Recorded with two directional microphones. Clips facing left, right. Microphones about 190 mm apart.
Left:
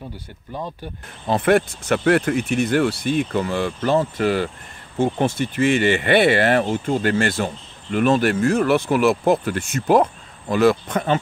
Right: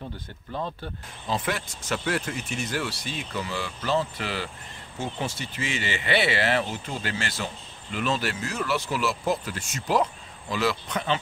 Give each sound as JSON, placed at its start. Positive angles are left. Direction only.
{"t": 0.5, "sound": "speech", "side_deg": 10}
{"t": 1.2, "sound": "speech", "side_deg": 60}